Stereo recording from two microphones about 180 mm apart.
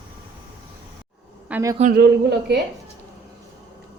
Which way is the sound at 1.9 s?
65° right (ahead or behind).